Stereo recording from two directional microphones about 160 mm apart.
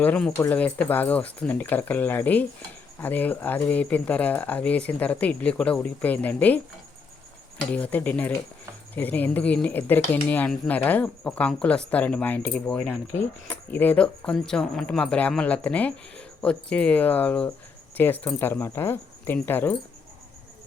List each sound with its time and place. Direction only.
0.0 s speech: 5° left (ahead or behind)
7.7 s speech: 10° left (ahead or behind)